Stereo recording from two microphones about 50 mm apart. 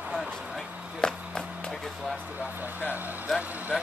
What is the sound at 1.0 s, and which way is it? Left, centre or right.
Speech, centre.